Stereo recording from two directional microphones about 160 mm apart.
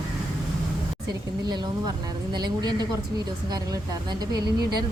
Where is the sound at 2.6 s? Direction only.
25° right (ahead or behind).